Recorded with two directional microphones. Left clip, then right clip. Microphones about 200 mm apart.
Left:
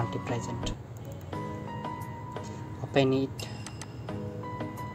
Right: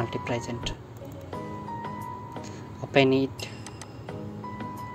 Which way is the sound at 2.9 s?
20° right (ahead or behind).